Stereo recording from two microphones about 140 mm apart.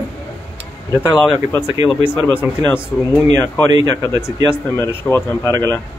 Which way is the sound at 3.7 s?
25° right (ahead or behind).